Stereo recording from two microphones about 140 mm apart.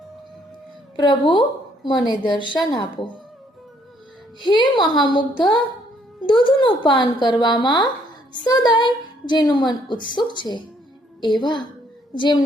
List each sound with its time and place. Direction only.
0.9 s a woman's voice: 35° left (ahead or behind)
4.4 s a woman's voice: 35° left (ahead or behind)